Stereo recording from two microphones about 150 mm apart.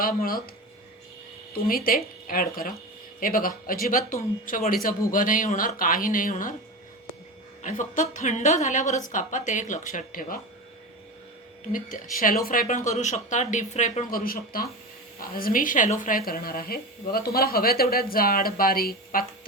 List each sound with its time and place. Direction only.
0.0 s speech: 70° left (ahead or behind)
1.5 s a woman's voice: 75° left (ahead or behind)
7.6 s a woman's voice: 55° left (ahead or behind)
11.7 s a woman's voice: 65° left (ahead or behind); by 14.1 s 50° left (ahead or behind)
14.1 s a woman's voice: 75° left (ahead or behind)